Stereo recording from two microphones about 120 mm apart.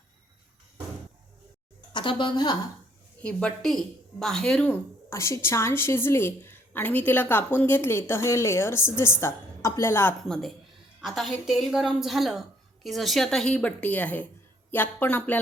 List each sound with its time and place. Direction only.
1.9 s speech: 40° left (ahead or behind)
3.2 s a woman's voice: 10° left (ahead or behind)
5.0 s a woman's voice: 25° left (ahead or behind)
10.2 s a woman's voice: 5° left (ahead or behind)